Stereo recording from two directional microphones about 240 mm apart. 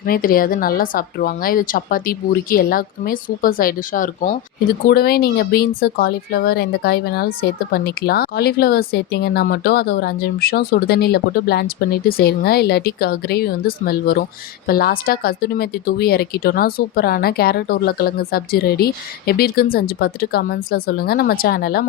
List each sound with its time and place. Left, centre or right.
0.0 s speech: left